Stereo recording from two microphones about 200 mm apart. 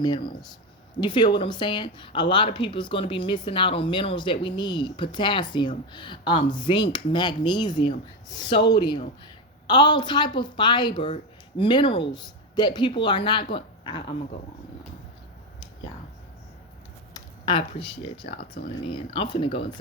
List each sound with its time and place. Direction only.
0.0 s speech: 20° left (ahead or behind)
17.2 s speech: 25° left (ahead or behind)